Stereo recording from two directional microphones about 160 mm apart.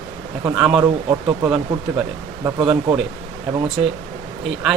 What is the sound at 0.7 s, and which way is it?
Speech, 35° right (ahead or behind).